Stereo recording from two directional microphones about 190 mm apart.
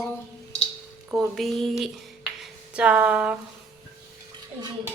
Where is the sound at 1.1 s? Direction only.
5° right (ahead or behind).